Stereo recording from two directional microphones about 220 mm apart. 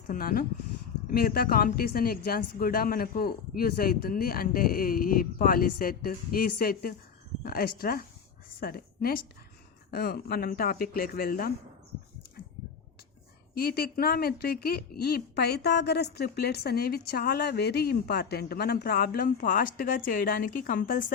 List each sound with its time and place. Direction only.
0.1 s a woman's voice: 40° left (ahead or behind)
13.5 s speech: 45° left (ahead or behind)